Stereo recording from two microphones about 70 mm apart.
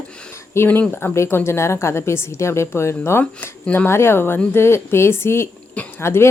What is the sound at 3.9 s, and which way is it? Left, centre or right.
Speech, left.